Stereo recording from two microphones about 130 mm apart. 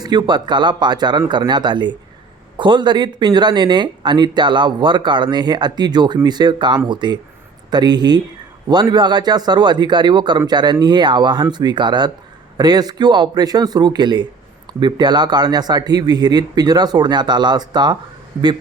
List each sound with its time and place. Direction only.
0.0 s speech: 35° right (ahead or behind)